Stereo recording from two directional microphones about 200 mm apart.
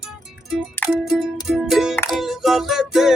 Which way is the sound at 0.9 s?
Centre (ahead or behind).